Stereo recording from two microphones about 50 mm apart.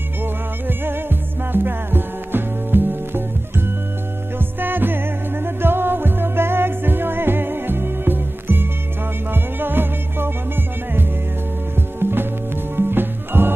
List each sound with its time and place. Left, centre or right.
0.2 s music: right